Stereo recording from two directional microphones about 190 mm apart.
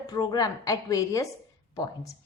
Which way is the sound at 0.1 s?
20° left (ahead or behind).